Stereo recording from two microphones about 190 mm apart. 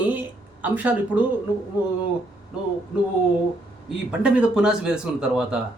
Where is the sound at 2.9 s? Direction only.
5° right (ahead or behind).